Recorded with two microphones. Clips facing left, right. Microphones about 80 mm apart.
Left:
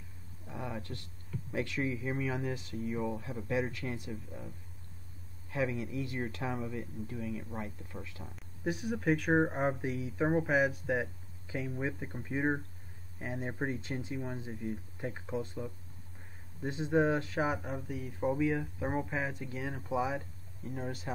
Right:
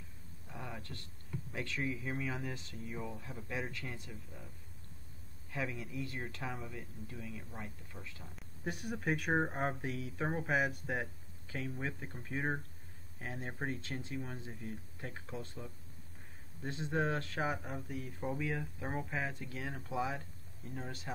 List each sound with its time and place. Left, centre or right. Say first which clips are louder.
0.5 s a sound: left 6 dB; centre
1.5 s speech: left 5 dB; left
5.7 s speech: left 5 dB; centre
8.4 s speech: left 6 dB; centre
11.4 s speech: left 4 dB; centre